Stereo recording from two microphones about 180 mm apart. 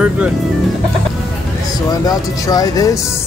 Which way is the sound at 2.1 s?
20° left (ahead or behind).